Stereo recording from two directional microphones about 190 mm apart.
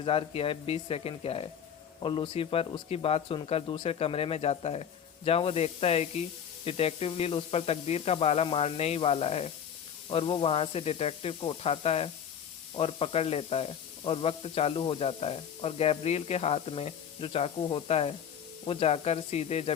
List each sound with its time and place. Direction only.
0.0 s speech: 30° left (ahead or behind)